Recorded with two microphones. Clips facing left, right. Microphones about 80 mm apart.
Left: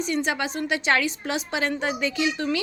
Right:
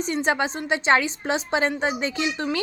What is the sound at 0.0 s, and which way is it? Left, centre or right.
A woman's voice, right.